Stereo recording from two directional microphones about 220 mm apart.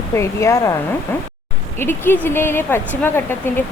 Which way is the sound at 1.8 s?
10° left (ahead or behind).